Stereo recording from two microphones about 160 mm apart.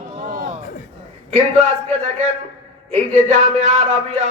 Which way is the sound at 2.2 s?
45° right (ahead or behind).